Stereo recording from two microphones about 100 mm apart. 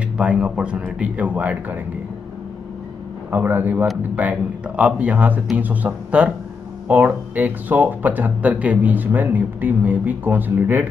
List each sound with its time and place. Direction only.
0.2 s speech: 10° right (ahead or behind)
3.3 s speech: 20° right (ahead or behind)